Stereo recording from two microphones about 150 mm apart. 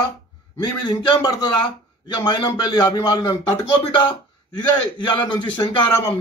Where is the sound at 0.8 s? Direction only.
30° left (ahead or behind).